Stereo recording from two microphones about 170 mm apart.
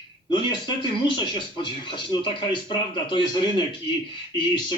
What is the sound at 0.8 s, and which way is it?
Speech, 30° left (ahead or behind).